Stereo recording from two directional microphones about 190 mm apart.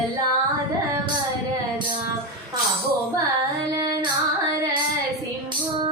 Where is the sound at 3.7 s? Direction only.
25° right (ahead or behind).